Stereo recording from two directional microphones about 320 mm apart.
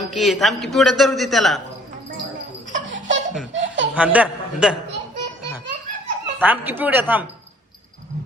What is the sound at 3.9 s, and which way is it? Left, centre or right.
Speech, centre.